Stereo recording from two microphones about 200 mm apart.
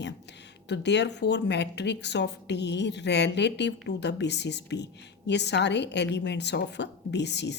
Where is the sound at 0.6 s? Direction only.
60° left (ahead or behind).